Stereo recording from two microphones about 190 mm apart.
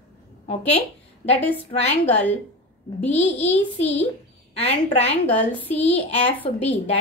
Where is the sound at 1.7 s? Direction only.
35° left (ahead or behind).